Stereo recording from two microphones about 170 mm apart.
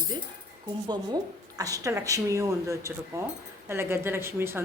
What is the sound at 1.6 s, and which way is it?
A woman's voice, 20° right (ahead or behind).